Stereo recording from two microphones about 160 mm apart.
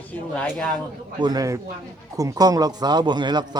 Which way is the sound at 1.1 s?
25° right (ahead or behind).